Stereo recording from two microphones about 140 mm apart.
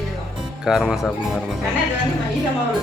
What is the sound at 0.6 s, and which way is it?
Speech, 5° right (ahead or behind).